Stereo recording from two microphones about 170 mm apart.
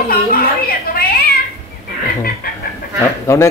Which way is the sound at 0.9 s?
60° left (ahead or behind).